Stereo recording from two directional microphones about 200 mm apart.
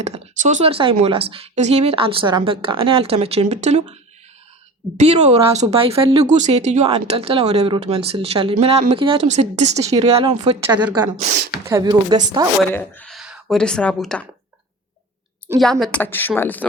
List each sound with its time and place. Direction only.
0.0 s speech: 35° right (ahead or behind)
4.9 s speech: 35° right (ahead or behind)
10.8 s speech: 10° right (ahead or behind)
12.7 s speech: 10° left (ahead or behind)
15.5 s a woman's voice: centre (ahead or behind)